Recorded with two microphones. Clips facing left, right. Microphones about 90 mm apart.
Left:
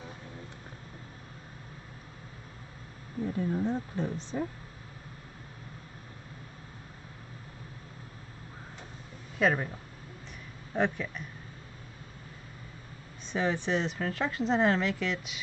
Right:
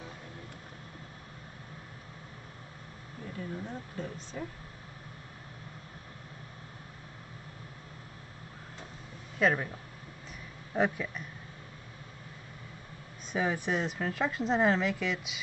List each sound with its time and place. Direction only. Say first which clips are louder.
3.3 s speech: left 8 dB; 30° left (ahead or behind)
9.4 s speech: left 1 dB; centre (ahead or behind)
10.7 s speech: even; 5° right (ahead or behind)
13.3 s speech: left 1 dB; 5° right (ahead or behind)